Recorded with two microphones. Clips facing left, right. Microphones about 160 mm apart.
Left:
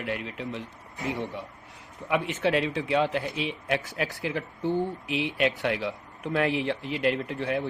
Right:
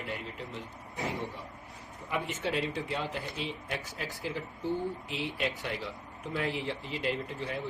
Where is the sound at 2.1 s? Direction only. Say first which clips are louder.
Left 8 dB; 70° left (ahead or behind).